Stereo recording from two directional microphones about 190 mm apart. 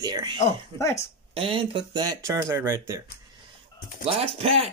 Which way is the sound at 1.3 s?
30° right (ahead or behind).